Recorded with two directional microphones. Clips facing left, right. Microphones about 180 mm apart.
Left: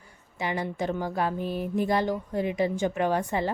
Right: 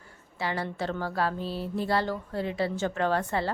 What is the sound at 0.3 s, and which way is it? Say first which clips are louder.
Speech: left 2 dB; 15° left (ahead or behind).